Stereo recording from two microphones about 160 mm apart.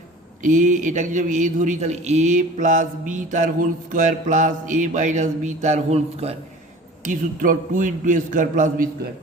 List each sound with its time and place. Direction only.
0.4 s a man's voice: 50° right (ahead or behind)
7.0 s a man's voice: 55° right (ahead or behind)